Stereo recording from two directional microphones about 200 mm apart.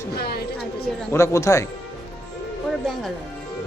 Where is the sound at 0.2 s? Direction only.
50° left (ahead or behind).